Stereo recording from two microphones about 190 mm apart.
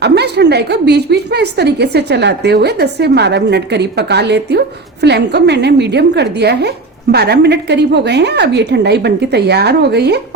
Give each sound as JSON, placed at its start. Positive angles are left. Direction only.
{"t": 0.0, "sound": "a woman's voice", "side_deg": -60}